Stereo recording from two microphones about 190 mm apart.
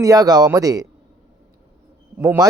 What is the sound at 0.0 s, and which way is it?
Speech, 20° right (ahead or behind).